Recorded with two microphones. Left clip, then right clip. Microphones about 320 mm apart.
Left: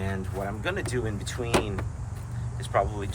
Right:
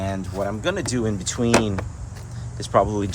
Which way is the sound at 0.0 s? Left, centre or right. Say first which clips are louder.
Right 6 dB; centre.